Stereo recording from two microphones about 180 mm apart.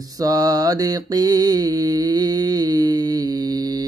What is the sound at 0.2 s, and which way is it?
Mantra, 20° right (ahead or behind).